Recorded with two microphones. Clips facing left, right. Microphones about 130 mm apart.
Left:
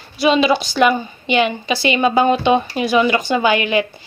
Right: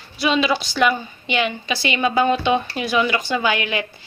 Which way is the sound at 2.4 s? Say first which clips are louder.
Left 4 dB; 45° left (ahead or behind).